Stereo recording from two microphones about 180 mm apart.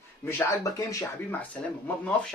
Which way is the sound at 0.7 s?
20° left (ahead or behind).